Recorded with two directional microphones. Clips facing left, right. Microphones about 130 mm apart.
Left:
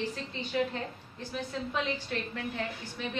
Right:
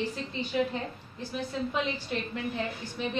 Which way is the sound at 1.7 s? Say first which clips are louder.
Right 2 dB; 15° right (ahead or behind).